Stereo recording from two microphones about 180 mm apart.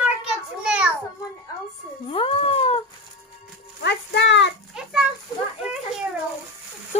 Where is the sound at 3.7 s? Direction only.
70° left (ahead or behind).